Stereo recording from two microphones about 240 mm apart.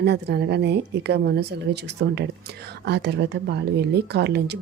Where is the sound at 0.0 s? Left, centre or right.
Right.